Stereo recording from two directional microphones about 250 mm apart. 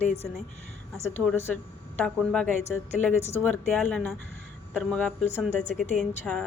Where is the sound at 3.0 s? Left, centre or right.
Left.